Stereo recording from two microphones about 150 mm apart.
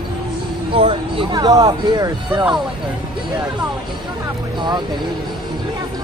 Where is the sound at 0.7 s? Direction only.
35° right (ahead or behind).